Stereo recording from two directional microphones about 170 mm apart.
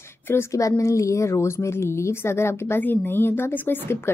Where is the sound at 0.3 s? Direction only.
15° left (ahead or behind).